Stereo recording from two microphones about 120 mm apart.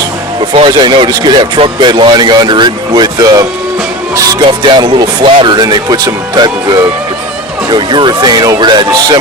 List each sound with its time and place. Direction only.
0.7 s speech: 40° right (ahead or behind)